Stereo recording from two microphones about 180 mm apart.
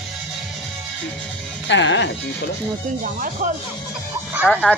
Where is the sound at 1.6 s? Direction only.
90° left.